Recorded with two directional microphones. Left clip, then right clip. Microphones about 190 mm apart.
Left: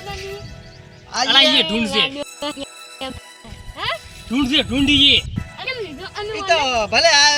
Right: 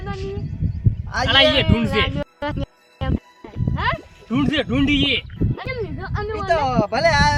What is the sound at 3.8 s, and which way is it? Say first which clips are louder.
Music: right 1 dB; 5° right (ahead or behind).